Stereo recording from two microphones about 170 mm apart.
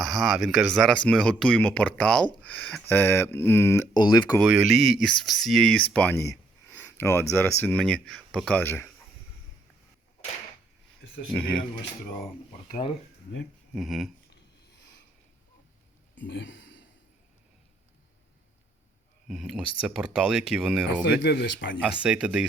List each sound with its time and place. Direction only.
0.0 s speech: centre (ahead or behind)
3.9 s speech: 25° left (ahead or behind)
4.4 s speech: 5° right (ahead or behind); by 8.9 s 10° left (ahead or behind)
11.3 s speech: 5° left (ahead or behind)
13.7 s speech: centre (ahead or behind)
16.1 s a sound: 90° left
19.3 s speech: 5° right (ahead or behind)
21.0 s speech: 85° left
22.0 s speech: 5° right (ahead or behind)